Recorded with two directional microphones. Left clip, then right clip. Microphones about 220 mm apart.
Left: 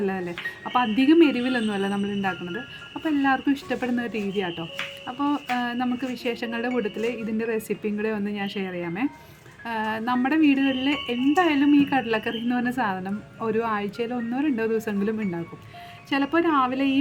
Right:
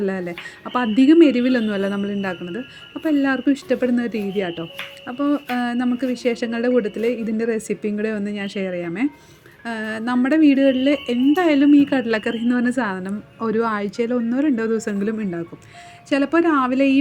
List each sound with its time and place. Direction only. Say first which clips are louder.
0.0 s a woman's voice: right 3 dB; 15° right (ahead or behind)